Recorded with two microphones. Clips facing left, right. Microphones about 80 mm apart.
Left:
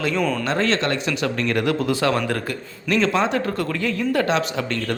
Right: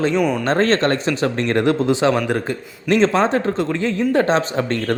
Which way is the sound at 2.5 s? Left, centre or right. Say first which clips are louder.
Right 5 dB; right.